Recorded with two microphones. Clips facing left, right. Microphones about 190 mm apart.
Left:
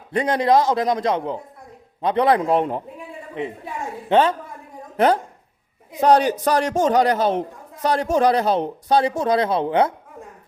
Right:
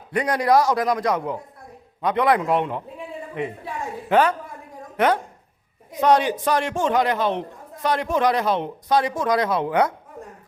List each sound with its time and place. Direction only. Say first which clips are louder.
0.1 s a man's voice: left 1 dB; 25° left (ahead or behind)
4.1 s a man's voice: left 2 dB; 25° left (ahead or behind)